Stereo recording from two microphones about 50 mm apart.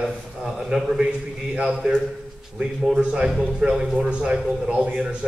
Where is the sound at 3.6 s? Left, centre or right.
Centre.